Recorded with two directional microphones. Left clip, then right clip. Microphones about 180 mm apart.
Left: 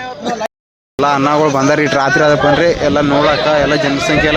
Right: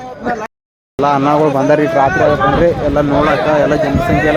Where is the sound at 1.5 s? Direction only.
20° left (ahead or behind).